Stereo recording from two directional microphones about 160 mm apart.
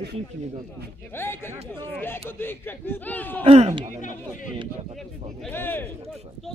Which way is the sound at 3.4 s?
40° right (ahead or behind).